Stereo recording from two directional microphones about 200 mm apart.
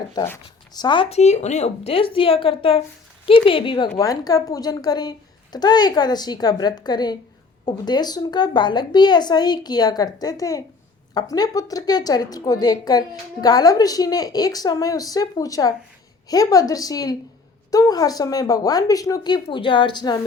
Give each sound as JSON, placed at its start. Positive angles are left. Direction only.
{"t": 0.3, "sound": "a woman's voice", "side_deg": 20}